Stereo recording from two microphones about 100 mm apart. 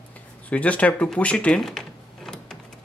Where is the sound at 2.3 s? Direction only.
5° left (ahead or behind).